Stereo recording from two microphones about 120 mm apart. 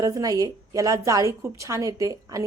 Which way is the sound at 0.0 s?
30° right (ahead or behind).